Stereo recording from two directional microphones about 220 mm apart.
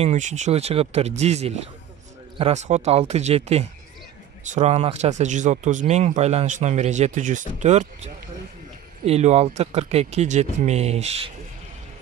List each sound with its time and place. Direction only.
0.0 s speech: 30° right (ahead or behind)